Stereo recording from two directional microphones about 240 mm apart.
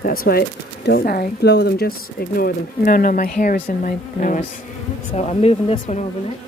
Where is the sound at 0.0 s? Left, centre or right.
Left.